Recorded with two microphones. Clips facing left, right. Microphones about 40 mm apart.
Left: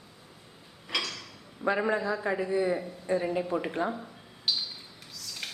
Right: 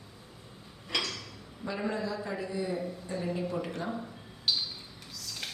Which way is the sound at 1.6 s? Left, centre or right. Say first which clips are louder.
Left 6 dB; left.